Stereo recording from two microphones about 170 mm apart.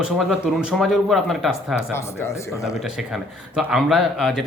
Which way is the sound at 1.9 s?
15° left (ahead or behind).